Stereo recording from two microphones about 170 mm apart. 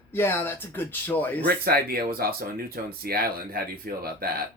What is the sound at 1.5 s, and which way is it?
Speech, 60° right (ahead or behind).